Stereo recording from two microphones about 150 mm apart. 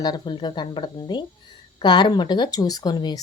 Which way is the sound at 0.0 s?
30° left (ahead or behind).